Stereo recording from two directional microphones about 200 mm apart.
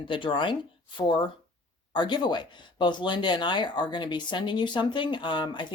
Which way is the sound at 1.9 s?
20° left (ahead or behind).